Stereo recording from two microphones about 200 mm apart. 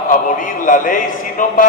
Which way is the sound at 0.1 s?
40° left (ahead or behind).